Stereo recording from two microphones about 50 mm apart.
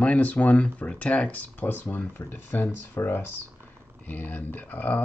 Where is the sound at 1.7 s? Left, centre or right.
Left.